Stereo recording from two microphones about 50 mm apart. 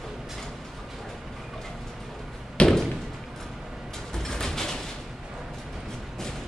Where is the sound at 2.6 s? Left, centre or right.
Left.